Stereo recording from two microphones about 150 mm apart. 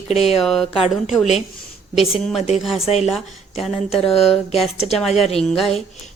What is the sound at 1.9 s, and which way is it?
Speech, 40° left (ahead or behind).